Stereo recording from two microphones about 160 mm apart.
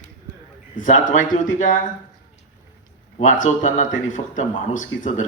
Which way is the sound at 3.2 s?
50° left (ahead or behind).